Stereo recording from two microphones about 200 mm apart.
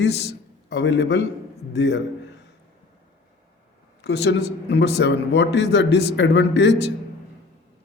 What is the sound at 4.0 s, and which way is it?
A man's voice, 55° left (ahead or behind).